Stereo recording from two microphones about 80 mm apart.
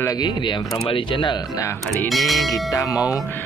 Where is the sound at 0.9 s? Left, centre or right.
Left.